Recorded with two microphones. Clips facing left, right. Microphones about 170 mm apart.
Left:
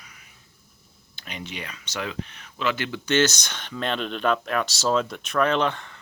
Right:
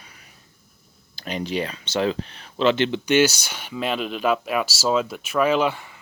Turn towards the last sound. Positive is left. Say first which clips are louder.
# right 3 dB
turn(degrees=-10)  # may be behind; listen again after turning